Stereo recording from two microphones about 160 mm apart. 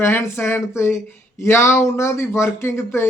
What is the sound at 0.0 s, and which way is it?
Speech, 15° left (ahead or behind).